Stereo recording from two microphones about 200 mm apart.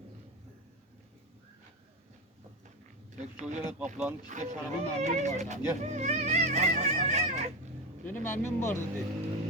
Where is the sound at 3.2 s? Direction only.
35° right (ahead or behind).